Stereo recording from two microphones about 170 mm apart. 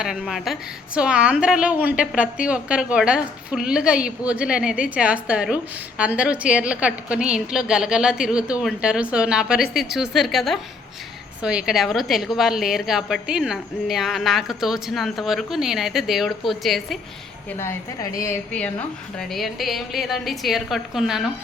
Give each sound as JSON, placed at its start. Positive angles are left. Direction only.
{"t": 0.0, "sound": "a woman's voice", "side_deg": -5}
{"t": 17.6, "sound": "a woman's voice", "side_deg": 15}
{"t": 19.2, "sound": "a woman's voice", "side_deg": 0}